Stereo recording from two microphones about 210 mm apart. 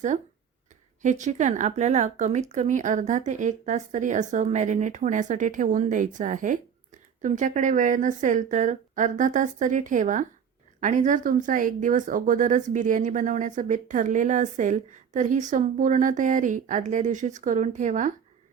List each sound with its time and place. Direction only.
1.0 s speech: 35° right (ahead or behind)